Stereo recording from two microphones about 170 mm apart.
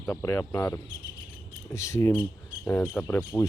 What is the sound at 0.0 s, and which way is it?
Speech, 15° left (ahead or behind).